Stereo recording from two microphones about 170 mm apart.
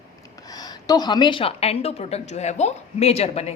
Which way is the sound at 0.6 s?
25° left (ahead or behind).